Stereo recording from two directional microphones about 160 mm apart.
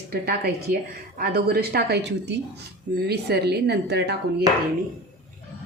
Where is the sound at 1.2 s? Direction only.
70° right (ahead or behind); by 4.2 s 90° right.